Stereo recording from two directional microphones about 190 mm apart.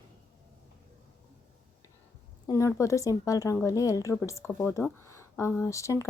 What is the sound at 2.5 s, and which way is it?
Speech, 15° left (ahead or behind).